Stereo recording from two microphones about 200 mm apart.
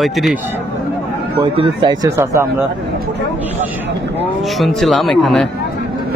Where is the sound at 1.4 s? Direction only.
20° right (ahead or behind).